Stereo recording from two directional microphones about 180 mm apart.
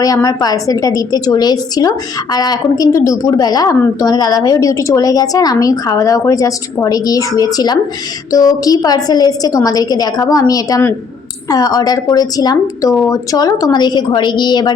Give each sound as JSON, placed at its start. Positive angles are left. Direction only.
{"t": 0.0, "sound": "a woman's voice", "side_deg": 20}